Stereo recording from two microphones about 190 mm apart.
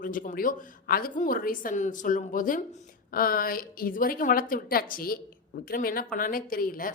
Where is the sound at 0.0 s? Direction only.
45° left (ahead or behind).